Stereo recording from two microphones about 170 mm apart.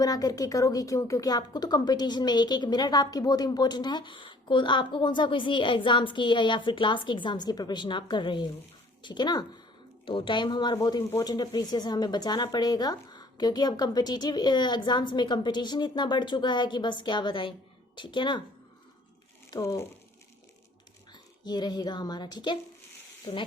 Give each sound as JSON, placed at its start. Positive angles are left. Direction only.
{"t": 0.0, "sound": "a woman's voice", "side_deg": 20}
{"t": 19.5, "sound": "speech", "side_deg": 20}
{"t": 21.1, "sound": "a woman's voice", "side_deg": 25}